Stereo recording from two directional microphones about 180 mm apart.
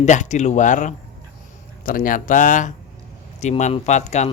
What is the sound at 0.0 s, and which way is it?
Speech, 40° left (ahead or behind).